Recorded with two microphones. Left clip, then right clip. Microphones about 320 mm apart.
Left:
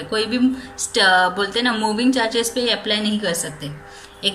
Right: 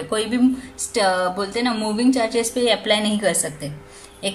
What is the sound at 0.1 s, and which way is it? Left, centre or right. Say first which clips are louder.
A woman's voice: left 1 dB; right.